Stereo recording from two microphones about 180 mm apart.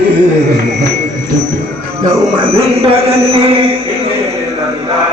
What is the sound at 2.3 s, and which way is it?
A man's voice, 30° right (ahead or behind).